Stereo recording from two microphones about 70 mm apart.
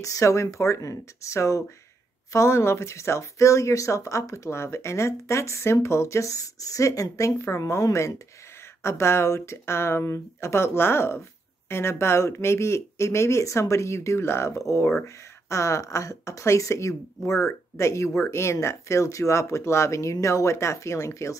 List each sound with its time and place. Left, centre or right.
0.0 s speech: left
4.5 s speech: left